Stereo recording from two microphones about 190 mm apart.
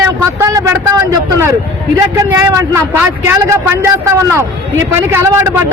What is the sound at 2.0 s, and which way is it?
A man's voice, 15° right (ahead or behind).